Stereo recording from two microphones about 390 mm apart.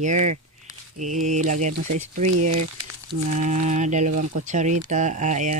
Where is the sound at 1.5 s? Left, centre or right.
Right.